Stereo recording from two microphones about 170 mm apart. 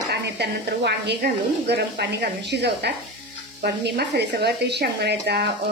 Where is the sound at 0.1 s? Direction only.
80° right.